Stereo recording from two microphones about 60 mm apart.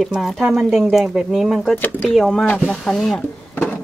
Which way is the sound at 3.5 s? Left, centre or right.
Left.